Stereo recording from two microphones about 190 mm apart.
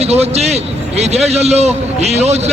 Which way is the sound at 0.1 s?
35° right (ahead or behind).